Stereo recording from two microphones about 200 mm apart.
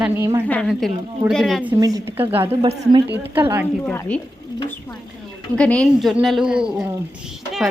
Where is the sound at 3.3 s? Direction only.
10° right (ahead or behind).